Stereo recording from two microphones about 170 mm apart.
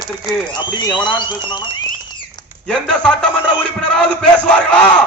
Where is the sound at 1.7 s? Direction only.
25° left (ahead or behind).